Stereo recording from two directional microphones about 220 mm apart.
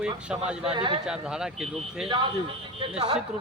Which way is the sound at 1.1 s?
5° right (ahead or behind).